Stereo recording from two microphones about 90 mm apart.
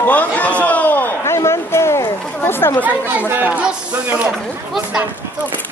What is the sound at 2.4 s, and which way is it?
Chatter, 25° left (ahead or behind).